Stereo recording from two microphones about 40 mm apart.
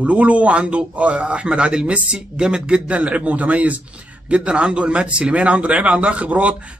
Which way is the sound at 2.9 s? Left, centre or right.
Right.